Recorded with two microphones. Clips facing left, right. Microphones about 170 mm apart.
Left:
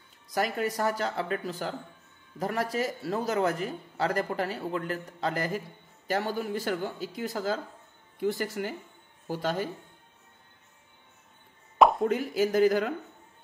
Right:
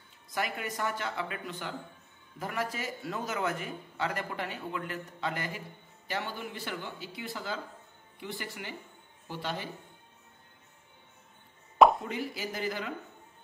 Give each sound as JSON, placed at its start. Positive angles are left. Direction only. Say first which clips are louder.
{"t": 0.3, "sound": "a man's voice", "louder": "left 6 dB", "side_deg": 40}
{"t": 12.0, "sound": "speech", "louder": "left 10 dB", "side_deg": 45}